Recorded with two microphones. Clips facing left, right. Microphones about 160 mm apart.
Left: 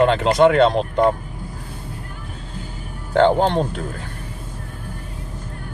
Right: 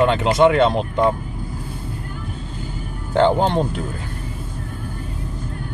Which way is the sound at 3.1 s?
5° right (ahead or behind).